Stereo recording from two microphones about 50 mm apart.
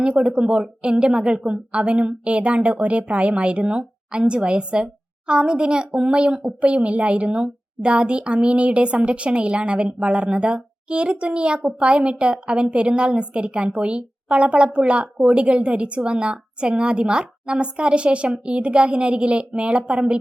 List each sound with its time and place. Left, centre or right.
0.0 s a woman's voice: centre